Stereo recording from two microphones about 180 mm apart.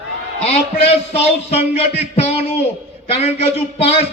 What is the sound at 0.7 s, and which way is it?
Speech, 35° left (ahead or behind).